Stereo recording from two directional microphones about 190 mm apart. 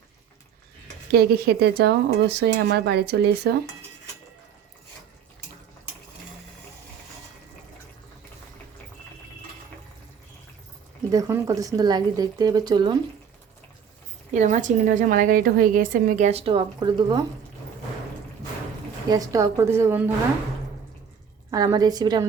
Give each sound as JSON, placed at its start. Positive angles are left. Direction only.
{"t": 1.1, "sound": "speech", "side_deg": -55}
{"t": 11.1, "sound": "speech", "side_deg": -15}
{"t": 14.3, "sound": "a woman's voice", "side_deg": -40}
{"t": 19.1, "sound": "a woman's voice", "side_deg": -15}
{"t": 21.5, "sound": "speech", "side_deg": -20}